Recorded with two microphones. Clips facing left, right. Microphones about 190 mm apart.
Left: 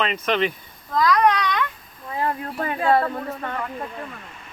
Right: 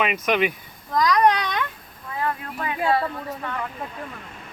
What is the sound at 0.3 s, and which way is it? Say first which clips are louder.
Speech: even; 10° right (ahead or behind).